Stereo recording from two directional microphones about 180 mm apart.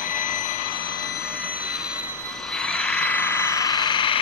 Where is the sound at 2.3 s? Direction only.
5° left (ahead or behind); by 4.1 s 25° left (ahead or behind).